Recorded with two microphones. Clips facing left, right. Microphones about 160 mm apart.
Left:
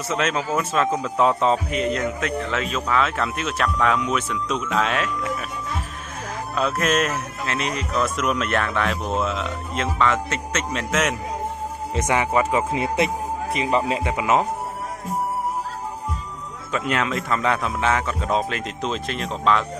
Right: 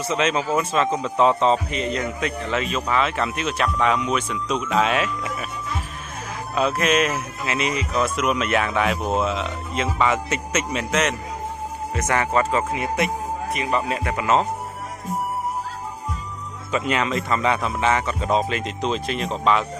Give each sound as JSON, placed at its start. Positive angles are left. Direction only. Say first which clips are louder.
{"t": 0.0, "sound": "speech", "louder": "right 2 dB", "side_deg": 0}
{"t": 6.5, "sound": "speech", "louder": "right 2 dB", "side_deg": 0}
{"t": 11.9, "sound": "speech", "louder": "left 1 dB", "side_deg": 20}
{"t": 12.7, "sound": "speech", "louder": "left 2 dB", "side_deg": 25}
{"t": 14.1, "sound": "speech", "louder": "right 1 dB", "side_deg": 10}
{"t": 16.7, "sound": "speech", "louder": "right 1 dB", "side_deg": 0}